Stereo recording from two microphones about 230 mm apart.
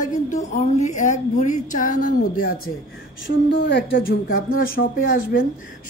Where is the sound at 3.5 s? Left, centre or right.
Left.